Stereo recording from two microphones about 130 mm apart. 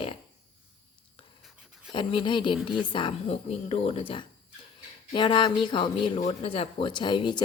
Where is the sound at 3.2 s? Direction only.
50° left (ahead or behind); by 6.2 s 35° left (ahead or behind).